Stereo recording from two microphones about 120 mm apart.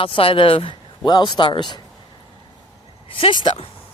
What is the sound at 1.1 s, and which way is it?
Speech, 35° left (ahead or behind).